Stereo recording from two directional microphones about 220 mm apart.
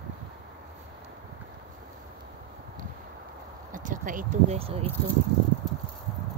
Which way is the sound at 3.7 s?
35° right (ahead or behind).